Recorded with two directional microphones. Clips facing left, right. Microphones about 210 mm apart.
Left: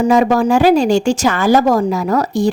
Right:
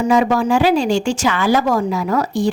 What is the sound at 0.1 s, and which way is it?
Speech, 45° left (ahead or behind).